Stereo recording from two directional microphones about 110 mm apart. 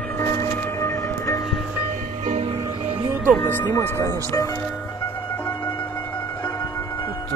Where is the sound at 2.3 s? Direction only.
70° right (ahead or behind).